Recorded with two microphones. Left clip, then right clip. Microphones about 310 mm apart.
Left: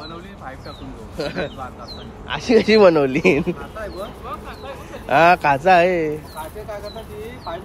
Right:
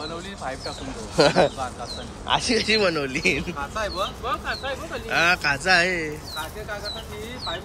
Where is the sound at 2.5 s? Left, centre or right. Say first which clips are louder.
Left 12 dB; centre.